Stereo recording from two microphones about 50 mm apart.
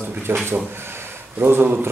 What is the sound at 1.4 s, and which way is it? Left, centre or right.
Speech, right.